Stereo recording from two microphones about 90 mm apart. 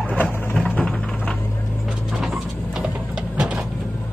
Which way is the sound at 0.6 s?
15° left (ahead or behind).